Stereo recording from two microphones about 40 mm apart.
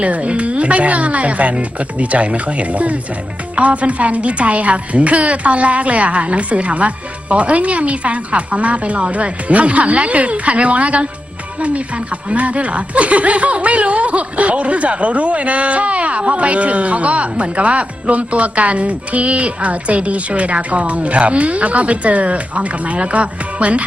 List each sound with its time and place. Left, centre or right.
0.0 s speech: right
12.3 s speech: right